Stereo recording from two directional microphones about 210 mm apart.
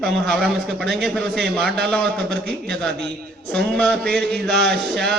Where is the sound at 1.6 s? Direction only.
50° right (ahead or behind).